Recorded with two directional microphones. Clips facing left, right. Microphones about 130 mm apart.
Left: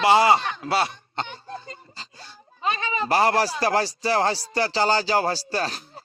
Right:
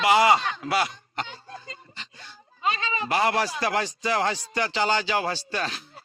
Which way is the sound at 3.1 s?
35° left (ahead or behind).